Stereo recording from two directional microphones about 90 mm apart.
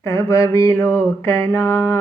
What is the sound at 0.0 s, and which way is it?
Mantra, 35° left (ahead or behind).